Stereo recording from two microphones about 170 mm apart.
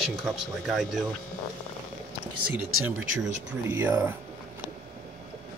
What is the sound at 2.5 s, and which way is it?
Speech, 10° right (ahead or behind).